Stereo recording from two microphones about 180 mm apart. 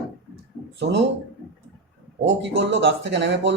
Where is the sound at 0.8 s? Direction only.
80° right.